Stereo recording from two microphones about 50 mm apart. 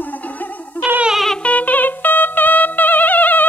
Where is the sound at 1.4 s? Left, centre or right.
Left.